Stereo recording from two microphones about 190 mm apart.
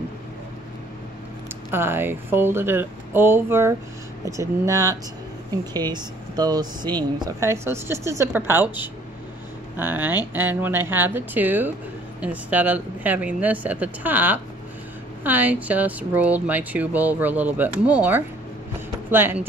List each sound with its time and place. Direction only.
1.7 s speech: 10° right (ahead or behind)